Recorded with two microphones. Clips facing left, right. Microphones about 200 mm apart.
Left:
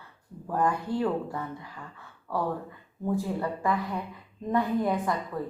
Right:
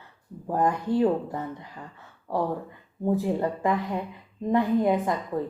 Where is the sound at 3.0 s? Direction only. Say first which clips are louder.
Right 4 dB; 25° right (ahead or behind).